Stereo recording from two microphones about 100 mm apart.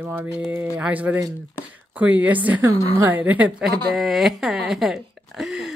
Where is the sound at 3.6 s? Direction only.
Centre (ahead or behind).